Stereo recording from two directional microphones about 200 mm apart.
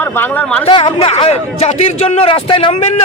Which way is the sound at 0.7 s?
25° left (ahead or behind).